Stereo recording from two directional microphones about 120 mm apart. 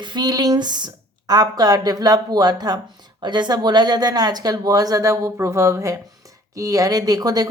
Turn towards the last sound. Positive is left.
turn(degrees=-30)  # may be behind; listen again after turning